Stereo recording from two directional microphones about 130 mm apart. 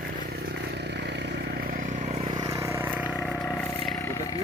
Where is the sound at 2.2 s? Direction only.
35° right (ahead or behind).